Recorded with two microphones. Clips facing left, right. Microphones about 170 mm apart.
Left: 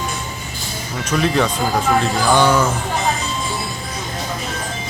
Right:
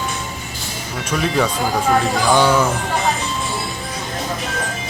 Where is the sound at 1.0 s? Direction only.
5° right (ahead or behind).